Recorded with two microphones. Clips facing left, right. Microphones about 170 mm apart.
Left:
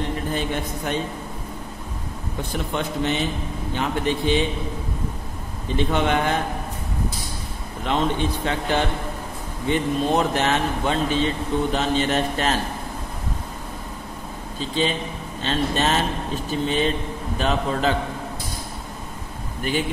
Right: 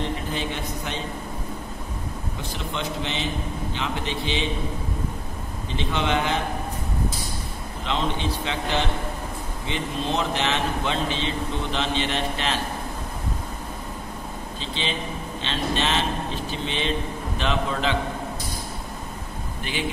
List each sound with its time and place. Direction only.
0.3 s a man's voice: 50° left (ahead or behind)
2.5 s a man's voice: 50° left (ahead or behind)
5.8 s a man's voice: 50° left (ahead or behind)
7.8 s a man's voice: 50° left (ahead or behind)
14.6 s a man's voice: 45° left (ahead or behind)